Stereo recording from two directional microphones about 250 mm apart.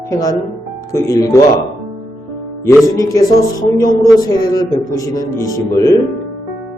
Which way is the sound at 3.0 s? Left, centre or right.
Centre.